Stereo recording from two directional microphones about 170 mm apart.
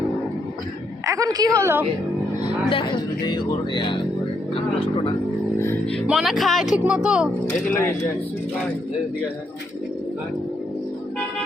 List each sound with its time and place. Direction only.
1.0 s a woman's voice: 20° right (ahead or behind)
2.6 s speech: 25° left (ahead or behind)
6.1 s speech: centre (ahead or behind)
7.7 s speech: 15° left (ahead or behind)